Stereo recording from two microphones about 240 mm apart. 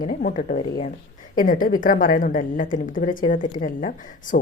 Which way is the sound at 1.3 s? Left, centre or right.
Left.